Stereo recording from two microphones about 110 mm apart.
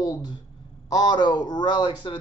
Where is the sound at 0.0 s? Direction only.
40° left (ahead or behind).